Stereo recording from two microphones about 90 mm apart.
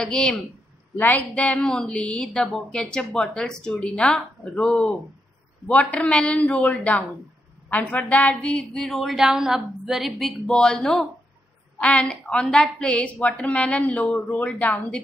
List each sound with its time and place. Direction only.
0.0 s a woman's voice: 10° left (ahead or behind)
0.9 s a woman's voice: 20° left (ahead or behind); by 4.9 s centre (ahead or behind)
5.7 s a woman's voice: 15° left (ahead or behind)